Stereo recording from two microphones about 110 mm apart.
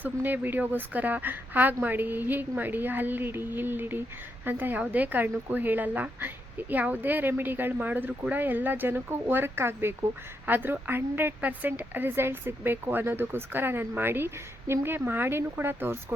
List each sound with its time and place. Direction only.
0.0 s a woman's voice: 15° right (ahead or behind)